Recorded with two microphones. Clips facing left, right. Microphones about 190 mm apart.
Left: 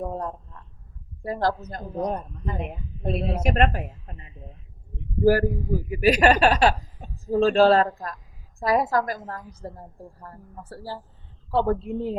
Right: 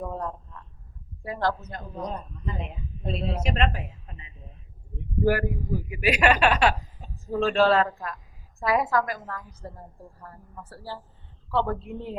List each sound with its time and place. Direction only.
0.0 s a sound: 40° left (ahead or behind)
1.2 s a woman's voice: 40° left (ahead or behind)
2.0 s a woman's voice: 55° left (ahead or behind)
5.2 s a woman's voice: 35° left (ahead or behind)